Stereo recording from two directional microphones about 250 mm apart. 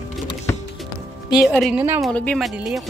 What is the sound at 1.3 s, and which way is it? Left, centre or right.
Speech, centre.